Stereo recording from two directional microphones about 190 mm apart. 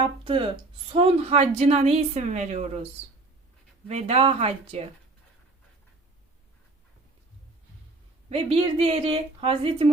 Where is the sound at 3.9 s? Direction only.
35° right (ahead or behind).